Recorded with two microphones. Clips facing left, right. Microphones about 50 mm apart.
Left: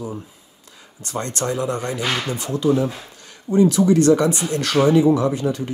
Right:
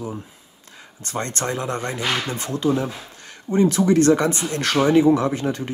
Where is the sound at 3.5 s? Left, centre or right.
Right.